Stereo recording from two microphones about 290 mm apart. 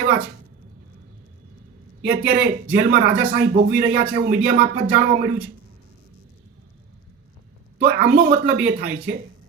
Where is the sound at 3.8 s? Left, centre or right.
Right.